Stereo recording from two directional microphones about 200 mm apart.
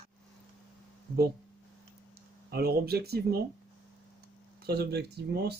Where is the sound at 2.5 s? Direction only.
50° right (ahead or behind).